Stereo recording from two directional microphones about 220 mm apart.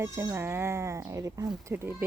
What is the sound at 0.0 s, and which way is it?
Speech, 15° right (ahead or behind).